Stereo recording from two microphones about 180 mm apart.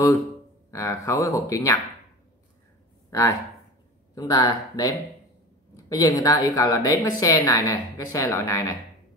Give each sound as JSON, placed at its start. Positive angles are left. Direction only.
{"t": 0.7, "sound": "a woman's voice", "side_deg": 15}
{"t": 3.1, "sound": "a woman's voice", "side_deg": 15}